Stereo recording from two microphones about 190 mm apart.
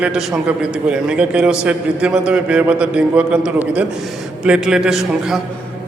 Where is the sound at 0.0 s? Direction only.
5° right (ahead or behind).